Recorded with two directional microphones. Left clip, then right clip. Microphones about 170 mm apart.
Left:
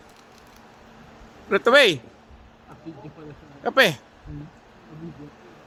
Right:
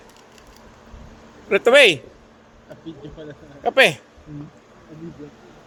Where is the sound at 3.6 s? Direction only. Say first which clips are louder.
Right 3 dB; 15° left (ahead or behind).